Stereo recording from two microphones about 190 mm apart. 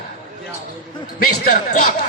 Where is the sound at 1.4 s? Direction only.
40° left (ahead or behind).